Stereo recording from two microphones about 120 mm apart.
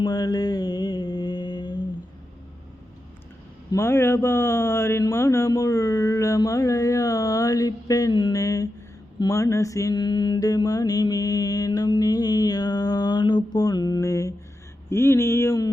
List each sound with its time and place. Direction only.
0.0 s mantra: 35° left (ahead or behind)
3.7 s speech: 20° left (ahead or behind)
9.1 s mantra: 30° left (ahead or behind)
14.8 s speech: 20° left (ahead or behind)